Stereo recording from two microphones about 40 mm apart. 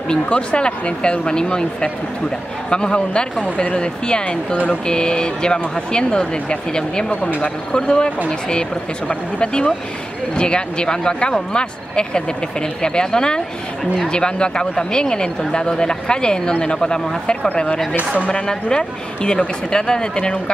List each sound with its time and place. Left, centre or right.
0.1 s speech: left
18.3 s speech: left